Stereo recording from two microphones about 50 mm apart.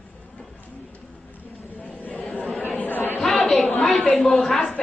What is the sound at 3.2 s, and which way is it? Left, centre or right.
Chatter, centre.